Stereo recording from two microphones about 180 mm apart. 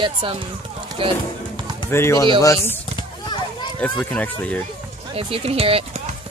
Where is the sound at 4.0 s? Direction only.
5° left (ahead or behind).